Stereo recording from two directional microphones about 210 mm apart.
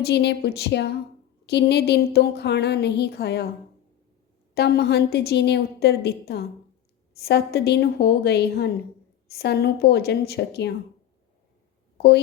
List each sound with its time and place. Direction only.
0.0 s speech: 55° left (ahead or behind)
4.5 s speech: 50° left (ahead or behind)